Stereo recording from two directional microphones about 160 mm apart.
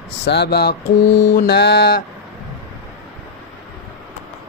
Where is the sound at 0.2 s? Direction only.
90° left.